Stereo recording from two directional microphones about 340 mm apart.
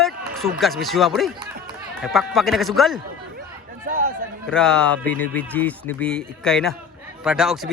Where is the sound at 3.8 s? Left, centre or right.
Right.